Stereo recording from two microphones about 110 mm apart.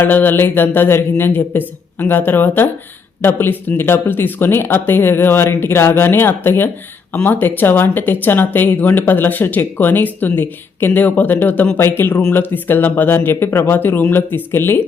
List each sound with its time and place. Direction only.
0.0 s speech: 15° left (ahead or behind)